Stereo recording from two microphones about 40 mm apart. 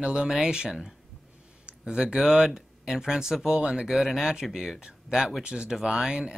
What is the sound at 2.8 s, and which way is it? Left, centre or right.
Speech, centre.